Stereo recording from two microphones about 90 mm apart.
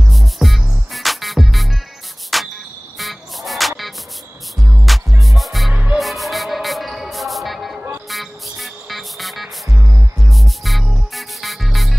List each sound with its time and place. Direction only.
0.1 s music: centre (ahead or behind)
5.7 s music: 15° right (ahead or behind)
5.9 s music: centre (ahead or behind)
9.7 s music: 30° right (ahead or behind)
10.2 s music: centre (ahead or behind)